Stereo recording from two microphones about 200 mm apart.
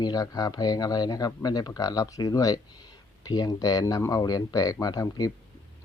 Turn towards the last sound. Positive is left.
turn(degrees=20)  # may be behind; listen again after turning